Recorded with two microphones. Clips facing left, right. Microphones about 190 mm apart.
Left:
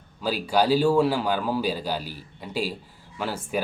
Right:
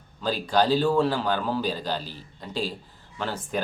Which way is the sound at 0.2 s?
10° left (ahead or behind).